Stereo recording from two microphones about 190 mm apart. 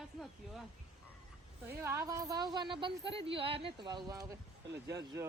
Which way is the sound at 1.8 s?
15° right (ahead or behind).